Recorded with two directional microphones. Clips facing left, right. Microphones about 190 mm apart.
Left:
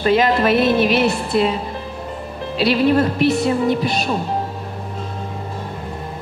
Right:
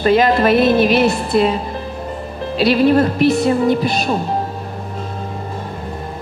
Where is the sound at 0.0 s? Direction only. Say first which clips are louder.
Right 3 dB; 45° right (ahead or behind).